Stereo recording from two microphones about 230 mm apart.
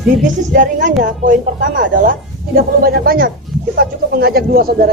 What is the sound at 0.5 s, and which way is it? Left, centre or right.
Speech, right.